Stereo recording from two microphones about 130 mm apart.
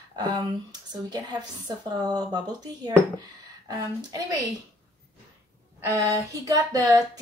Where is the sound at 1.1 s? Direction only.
30° right (ahead or behind).